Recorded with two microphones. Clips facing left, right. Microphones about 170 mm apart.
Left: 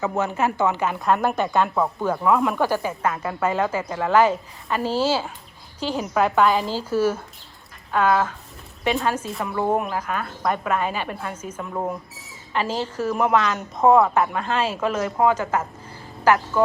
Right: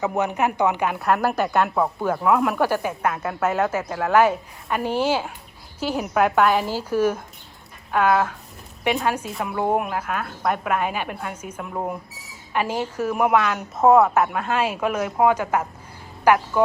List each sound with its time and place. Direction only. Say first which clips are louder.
0.0 s a woman's voice: right 1 dB; 15° right (ahead or behind)
1.0 s a woman's voice: even; centre (ahead or behind)